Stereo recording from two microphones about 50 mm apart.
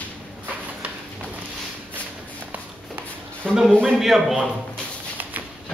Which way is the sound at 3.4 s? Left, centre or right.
Centre.